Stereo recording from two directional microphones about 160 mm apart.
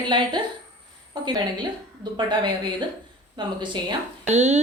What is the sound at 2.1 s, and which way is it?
A woman's voice, 25° right (ahead or behind).